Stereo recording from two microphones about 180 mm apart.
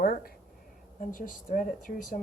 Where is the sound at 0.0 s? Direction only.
55° left (ahead or behind).